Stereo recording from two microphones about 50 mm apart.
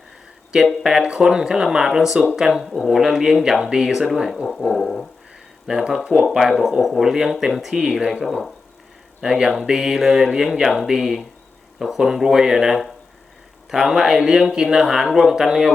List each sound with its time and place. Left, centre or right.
0.7 s speech: centre
4.4 s speech: centre
5.7 s speech: centre
6.3 s speech: centre
7.7 s speech: centre
8.2 s speech: centre
9.2 s speech: centre